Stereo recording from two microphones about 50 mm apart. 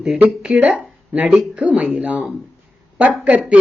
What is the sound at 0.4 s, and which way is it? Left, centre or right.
Speech, right.